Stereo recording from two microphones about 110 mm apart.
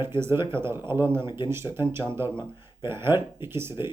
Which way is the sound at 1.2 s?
45° left (ahead or behind).